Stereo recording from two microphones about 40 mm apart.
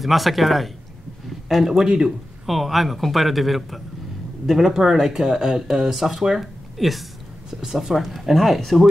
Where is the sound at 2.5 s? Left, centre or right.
Centre.